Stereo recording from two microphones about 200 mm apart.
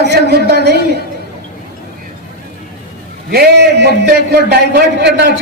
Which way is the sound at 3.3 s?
55° right (ahead or behind).